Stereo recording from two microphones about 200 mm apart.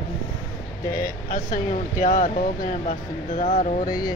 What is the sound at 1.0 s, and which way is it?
Speech, 45° left (ahead or behind).